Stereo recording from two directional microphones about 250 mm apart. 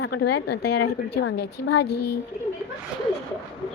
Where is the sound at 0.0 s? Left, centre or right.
Left.